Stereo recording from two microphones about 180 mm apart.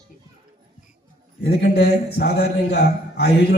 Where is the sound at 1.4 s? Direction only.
65° left (ahead or behind).